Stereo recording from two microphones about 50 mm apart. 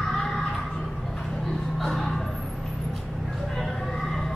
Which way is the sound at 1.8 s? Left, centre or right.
Centre.